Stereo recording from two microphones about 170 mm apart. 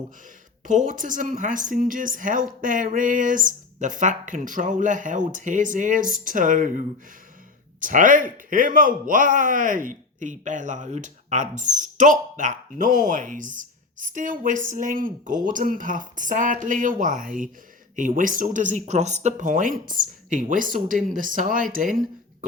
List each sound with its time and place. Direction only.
0.6 s a woman's voice: 50° right (ahead or behind)